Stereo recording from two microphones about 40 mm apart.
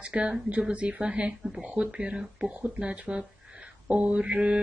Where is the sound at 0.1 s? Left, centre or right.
Right.